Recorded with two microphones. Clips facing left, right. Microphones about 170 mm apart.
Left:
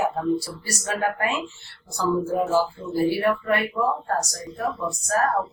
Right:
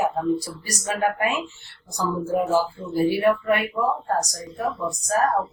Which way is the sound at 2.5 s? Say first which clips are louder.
Even; 15° right (ahead or behind).